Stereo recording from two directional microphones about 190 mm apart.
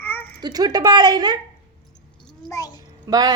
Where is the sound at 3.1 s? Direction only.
20° right (ahead or behind).